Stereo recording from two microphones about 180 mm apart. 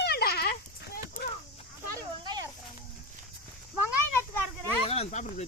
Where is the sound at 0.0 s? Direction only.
60° left (ahead or behind).